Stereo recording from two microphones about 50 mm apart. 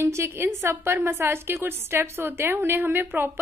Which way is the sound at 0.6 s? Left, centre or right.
Right.